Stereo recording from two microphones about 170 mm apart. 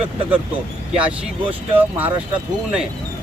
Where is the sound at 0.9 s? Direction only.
5° right (ahead or behind).